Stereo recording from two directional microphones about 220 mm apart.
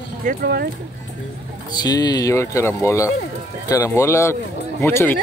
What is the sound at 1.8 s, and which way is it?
Speech, 20° left (ahead or behind).